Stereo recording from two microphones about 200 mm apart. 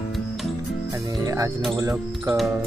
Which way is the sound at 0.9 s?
15° right (ahead or behind).